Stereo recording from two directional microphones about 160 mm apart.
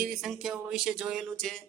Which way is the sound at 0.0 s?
Centre (ahead or behind).